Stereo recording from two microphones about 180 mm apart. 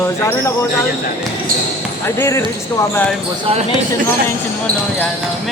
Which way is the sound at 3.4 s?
35° right (ahead or behind).